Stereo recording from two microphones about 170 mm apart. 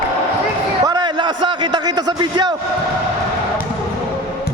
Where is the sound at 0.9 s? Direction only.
25° right (ahead or behind).